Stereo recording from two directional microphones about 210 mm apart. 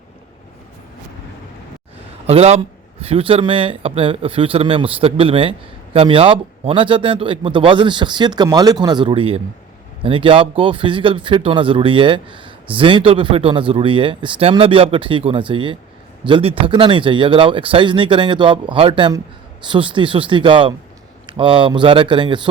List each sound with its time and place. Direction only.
2.2 s speech: 30° right (ahead or behind)